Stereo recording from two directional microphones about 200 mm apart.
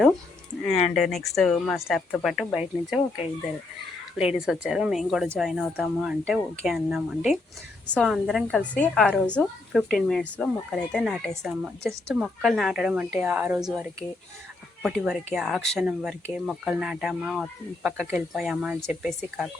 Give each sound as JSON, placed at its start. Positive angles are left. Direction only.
{"t": 0.7, "sound": "speech", "side_deg": 30}
{"t": 0.9, "sound": "a woman's voice", "side_deg": 0}
{"t": 4.2, "sound": "a woman's voice", "side_deg": -5}